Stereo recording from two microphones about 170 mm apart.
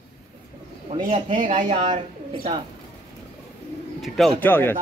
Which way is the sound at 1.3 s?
50° right (ahead or behind).